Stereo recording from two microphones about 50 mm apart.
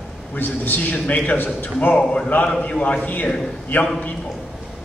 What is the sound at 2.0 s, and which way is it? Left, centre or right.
A man's voice, left.